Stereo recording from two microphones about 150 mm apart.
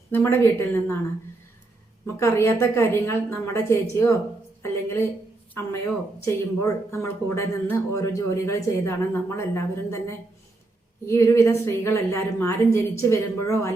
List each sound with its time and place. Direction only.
0.1 s a woman's voice: 15° left (ahead or behind)
2.0 s a woman's voice: 20° left (ahead or behind)
6.2 s speech: 20° left (ahead or behind)
11.0 s speech: 15° left (ahead or behind)